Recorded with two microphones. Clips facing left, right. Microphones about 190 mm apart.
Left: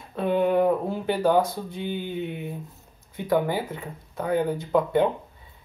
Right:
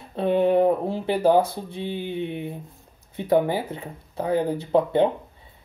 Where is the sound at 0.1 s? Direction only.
30° right (ahead or behind).